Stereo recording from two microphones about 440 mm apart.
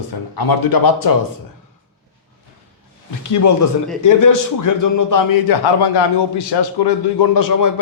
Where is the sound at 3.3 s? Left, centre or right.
Left.